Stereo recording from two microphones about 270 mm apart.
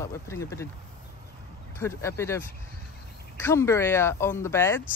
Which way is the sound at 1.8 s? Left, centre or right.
Centre.